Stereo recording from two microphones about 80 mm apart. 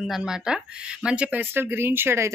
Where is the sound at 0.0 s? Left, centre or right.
Centre.